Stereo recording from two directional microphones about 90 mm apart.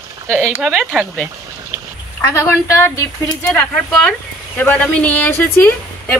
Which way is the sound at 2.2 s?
30° left (ahead or behind).